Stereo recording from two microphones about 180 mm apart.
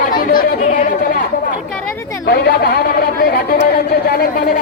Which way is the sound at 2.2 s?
60° left (ahead or behind).